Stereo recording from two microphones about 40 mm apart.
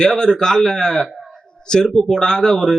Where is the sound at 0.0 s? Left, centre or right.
Centre.